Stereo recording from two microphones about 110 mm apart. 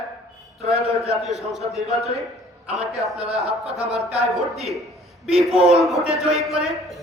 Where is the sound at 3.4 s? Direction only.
70° right (ahead or behind).